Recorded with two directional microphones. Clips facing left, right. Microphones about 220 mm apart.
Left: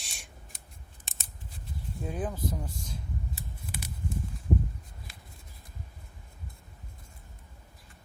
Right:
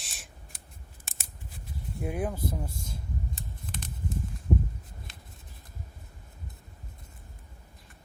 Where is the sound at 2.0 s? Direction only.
15° right (ahead or behind).